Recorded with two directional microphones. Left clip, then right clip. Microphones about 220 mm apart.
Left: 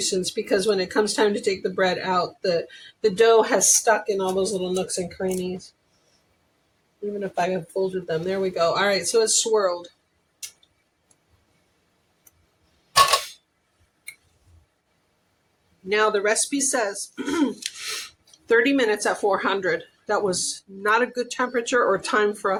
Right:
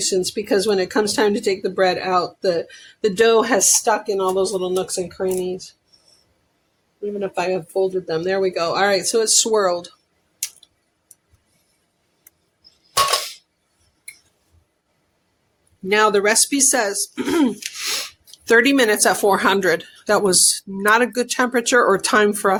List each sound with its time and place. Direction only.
0.0 s speech: 40° right (ahead or behind)
7.2 s speech: 35° right (ahead or behind); by 9.9 s 55° right (ahead or behind)
15.9 s speech: 55° right (ahead or behind)